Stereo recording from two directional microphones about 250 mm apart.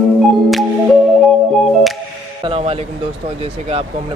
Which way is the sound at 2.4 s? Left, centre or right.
Right.